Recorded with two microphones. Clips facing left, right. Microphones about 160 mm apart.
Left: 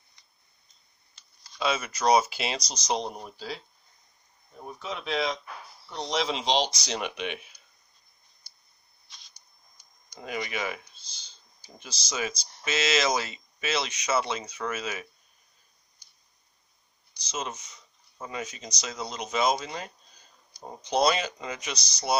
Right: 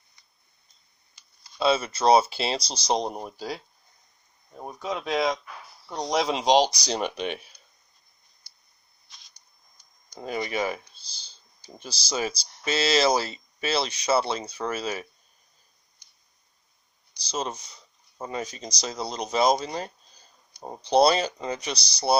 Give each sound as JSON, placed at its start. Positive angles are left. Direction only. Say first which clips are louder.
{"t": 1.5, "sound": "speech", "louder": "right 5 dB", "side_deg": -30}
{"t": 4.8, "sound": "speech", "louder": "right 4 dB", "side_deg": -40}
{"t": 9.7, "sound": "speech", "louder": "right 5 dB", "side_deg": -35}
{"t": 17.2, "sound": "speech", "louder": "right 4 dB", "side_deg": -35}